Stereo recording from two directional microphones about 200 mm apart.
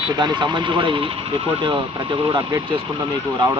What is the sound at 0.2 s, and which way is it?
Speech, 20° right (ahead or behind).